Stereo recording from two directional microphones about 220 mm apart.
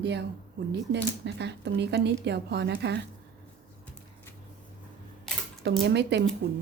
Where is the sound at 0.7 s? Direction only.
50° right (ahead or behind).